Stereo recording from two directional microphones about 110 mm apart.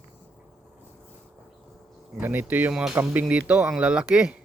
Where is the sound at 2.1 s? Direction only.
15° right (ahead or behind).